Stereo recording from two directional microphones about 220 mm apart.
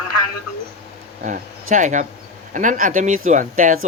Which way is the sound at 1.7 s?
35° right (ahead or behind).